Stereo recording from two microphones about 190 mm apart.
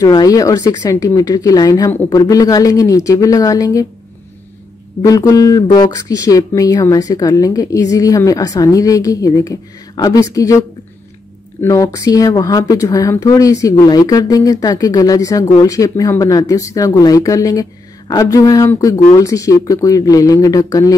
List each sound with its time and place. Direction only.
0.0 s speech: 20° left (ahead or behind)
5.0 s speech: 20° left (ahead or behind)
11.6 s speech: 15° left (ahead or behind)